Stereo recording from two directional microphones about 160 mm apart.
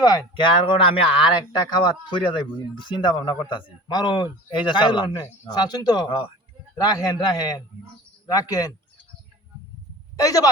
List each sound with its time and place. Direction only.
0.0 s a man's voice: 25° left (ahead or behind)
10.2 s a man's voice: 20° left (ahead or behind)